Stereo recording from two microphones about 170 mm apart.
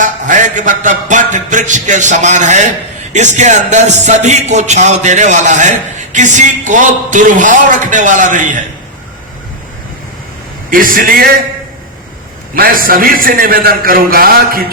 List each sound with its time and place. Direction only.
0.0 s a sound: 50° right (ahead or behind)
3.1 s music: 45° right (ahead or behind)
10.7 s a man's voice: 55° right (ahead or behind)
12.5 s a man's voice: 60° right (ahead or behind)